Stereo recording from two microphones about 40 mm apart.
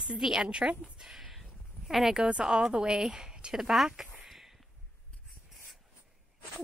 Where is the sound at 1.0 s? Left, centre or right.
Centre.